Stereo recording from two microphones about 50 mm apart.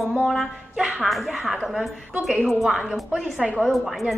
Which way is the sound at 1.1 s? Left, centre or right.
Centre.